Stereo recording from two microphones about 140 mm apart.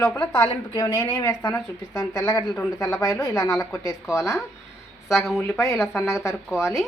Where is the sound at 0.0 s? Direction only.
15° left (ahead or behind).